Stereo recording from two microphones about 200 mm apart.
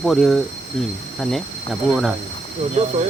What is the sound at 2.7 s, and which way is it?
Speech, 35° right (ahead or behind).